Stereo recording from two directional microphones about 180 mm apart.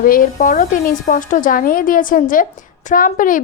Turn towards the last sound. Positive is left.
turn(degrees=50)  # may be behind; listen again after turning